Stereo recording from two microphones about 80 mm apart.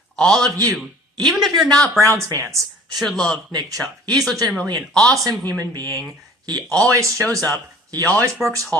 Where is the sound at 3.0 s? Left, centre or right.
Centre.